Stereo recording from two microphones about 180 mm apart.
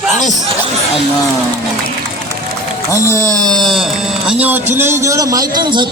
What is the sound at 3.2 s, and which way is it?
Speech, 20° right (ahead or behind).